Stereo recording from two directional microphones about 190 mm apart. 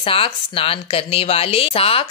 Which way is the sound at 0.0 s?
30° left (ahead or behind).